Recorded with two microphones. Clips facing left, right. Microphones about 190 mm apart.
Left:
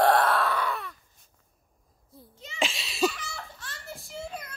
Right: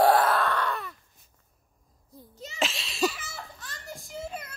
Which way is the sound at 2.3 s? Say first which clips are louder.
Right 4 dB; 40° right (ahead or behind).